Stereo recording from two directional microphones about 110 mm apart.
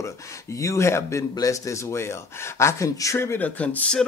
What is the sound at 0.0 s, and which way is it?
Speech, 30° left (ahead or behind).